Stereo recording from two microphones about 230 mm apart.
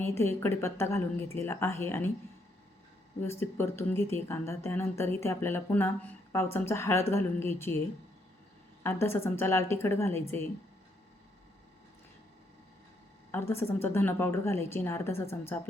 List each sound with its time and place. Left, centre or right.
0.0 s speech: centre
3.2 s speech: centre
8.8 s speech: centre
13.3 s speech: centre